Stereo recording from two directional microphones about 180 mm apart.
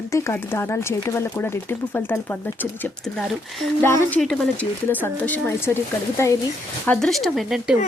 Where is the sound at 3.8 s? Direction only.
10° left (ahead or behind).